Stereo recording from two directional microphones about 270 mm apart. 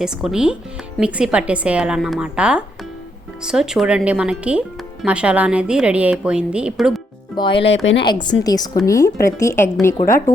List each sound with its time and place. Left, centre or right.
0.0 s a woman's voice: centre
7.3 s a woman's voice: centre